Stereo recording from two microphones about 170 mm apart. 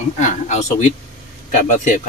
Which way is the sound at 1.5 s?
50° left (ahead or behind).